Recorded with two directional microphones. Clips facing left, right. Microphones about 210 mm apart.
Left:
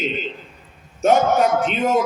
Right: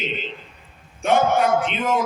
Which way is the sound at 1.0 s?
40° left (ahead or behind).